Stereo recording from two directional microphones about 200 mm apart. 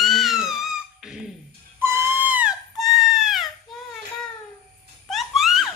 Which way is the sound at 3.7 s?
Centre (ahead or behind).